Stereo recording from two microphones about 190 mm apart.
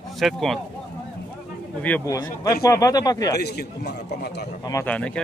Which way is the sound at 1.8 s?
10° left (ahead or behind).